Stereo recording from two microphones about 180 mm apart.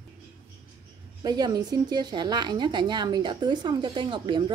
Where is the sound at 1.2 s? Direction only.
20° right (ahead or behind).